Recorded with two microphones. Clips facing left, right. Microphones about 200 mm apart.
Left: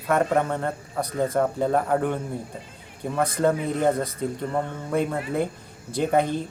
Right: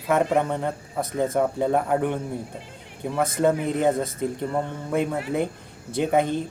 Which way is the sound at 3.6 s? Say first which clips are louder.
Right 1 dB; 20° right (ahead or behind).